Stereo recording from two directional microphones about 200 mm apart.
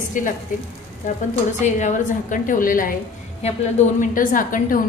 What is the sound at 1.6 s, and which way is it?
A woman's voice, 40° left (ahead or behind).